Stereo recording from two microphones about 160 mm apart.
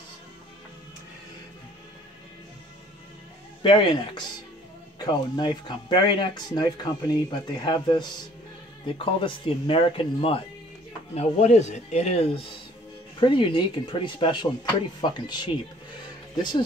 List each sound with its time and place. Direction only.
3.6 s speech: 30° left (ahead or behind)